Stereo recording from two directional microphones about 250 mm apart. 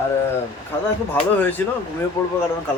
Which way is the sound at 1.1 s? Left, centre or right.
Centre.